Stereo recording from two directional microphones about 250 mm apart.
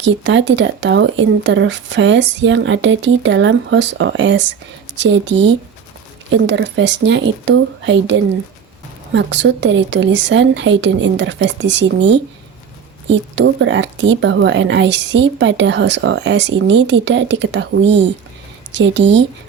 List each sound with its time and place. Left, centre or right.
0.0 s a woman's voice: right